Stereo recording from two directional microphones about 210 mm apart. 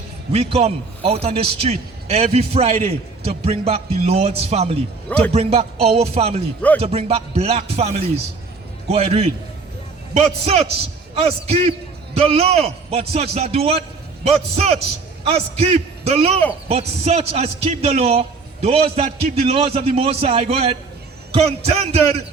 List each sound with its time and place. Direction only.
0.3 s a man's voice: 30° right (ahead or behind)
5.0 s a man's voice: 5° left (ahead or behind)
5.3 s a man's voice: 30° right (ahead or behind)